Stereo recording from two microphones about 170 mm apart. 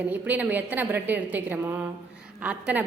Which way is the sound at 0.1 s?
10° right (ahead or behind).